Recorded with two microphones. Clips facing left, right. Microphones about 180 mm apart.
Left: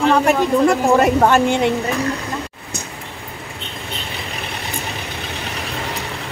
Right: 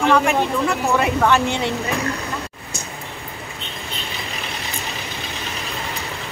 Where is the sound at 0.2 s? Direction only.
45° left (ahead or behind).